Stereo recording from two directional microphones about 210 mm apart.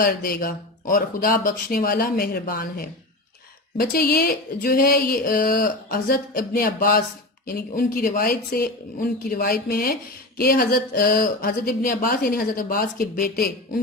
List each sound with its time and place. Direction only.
0.0 s speech: 45° left (ahead or behind)